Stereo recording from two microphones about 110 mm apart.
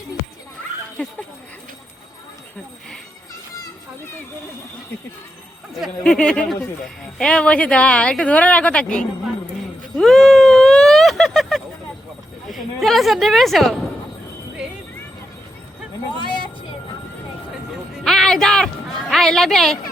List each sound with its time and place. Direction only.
1.0 s speech: 10° left (ahead or behind)
6.0 s speech: 5° left (ahead or behind)
10.0 s a sound: centre (ahead or behind)
12.5 s a woman's voice: centre (ahead or behind)
18.0 s music: 5° left (ahead or behind)
19.1 s a woman's voice: centre (ahead or behind)